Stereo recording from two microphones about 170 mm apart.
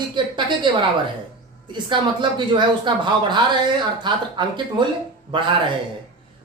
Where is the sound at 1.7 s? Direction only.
30° right (ahead or behind).